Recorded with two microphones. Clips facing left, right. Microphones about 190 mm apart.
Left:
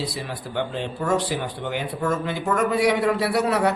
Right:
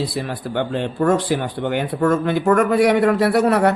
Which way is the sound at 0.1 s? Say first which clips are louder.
Right 6 dB; 55° right (ahead or behind).